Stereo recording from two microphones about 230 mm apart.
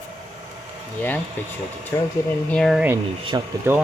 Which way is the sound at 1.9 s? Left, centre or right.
Centre.